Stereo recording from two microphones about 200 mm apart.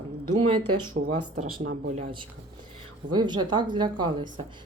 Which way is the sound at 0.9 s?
45° right (ahead or behind).